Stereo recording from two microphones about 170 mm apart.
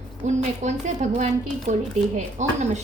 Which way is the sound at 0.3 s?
45° right (ahead or behind).